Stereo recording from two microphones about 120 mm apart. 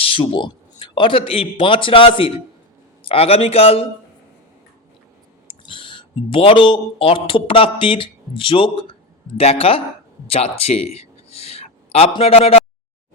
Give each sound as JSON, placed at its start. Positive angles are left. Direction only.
{"t": 0.0, "sound": "speech", "side_deg": 50}
{"t": 5.5, "sound": "a man's voice", "side_deg": 45}
{"t": 9.4, "sound": "a man's voice", "side_deg": 60}